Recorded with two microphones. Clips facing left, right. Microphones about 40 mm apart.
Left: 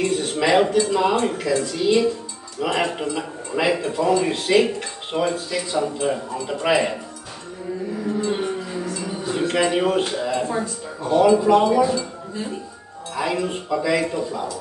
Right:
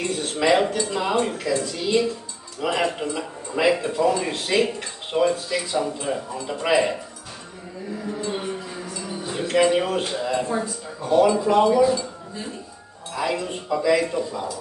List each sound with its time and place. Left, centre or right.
0.4 s speech: centre
8.8 s music: centre
9.3 s a man's voice: centre